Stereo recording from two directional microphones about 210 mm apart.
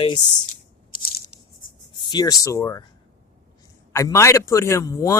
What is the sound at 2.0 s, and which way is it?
Speech, 20° left (ahead or behind).